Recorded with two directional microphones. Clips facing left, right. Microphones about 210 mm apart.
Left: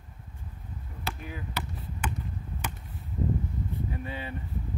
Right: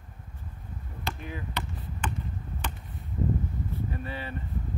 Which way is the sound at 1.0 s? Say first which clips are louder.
Right 1 dB; 5° left (ahead or behind).